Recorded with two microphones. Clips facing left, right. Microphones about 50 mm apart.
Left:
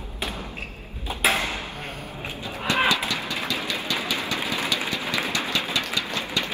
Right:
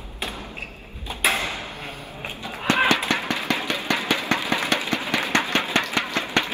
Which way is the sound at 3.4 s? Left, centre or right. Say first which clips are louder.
Right 4 dB; right.